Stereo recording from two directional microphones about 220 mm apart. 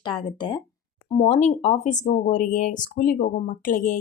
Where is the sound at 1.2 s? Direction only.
30° left (ahead or behind).